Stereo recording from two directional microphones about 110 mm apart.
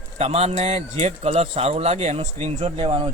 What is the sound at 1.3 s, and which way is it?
A man's voice, 65° right (ahead or behind).